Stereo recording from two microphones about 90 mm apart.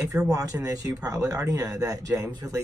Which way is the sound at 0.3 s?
40° right (ahead or behind).